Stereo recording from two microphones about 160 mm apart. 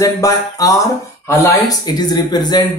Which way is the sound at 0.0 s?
20° left (ahead or behind).